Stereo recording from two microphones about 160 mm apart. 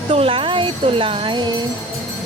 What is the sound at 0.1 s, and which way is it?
Speech, 35° right (ahead or behind).